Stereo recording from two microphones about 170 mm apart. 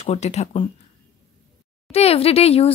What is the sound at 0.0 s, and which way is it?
Speech, 40° left (ahead or behind).